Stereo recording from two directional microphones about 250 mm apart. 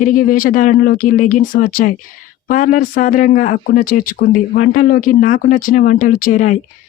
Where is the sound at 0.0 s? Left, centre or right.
Left.